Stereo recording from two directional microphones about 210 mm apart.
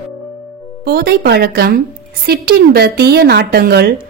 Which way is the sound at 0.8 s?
50° right (ahead or behind).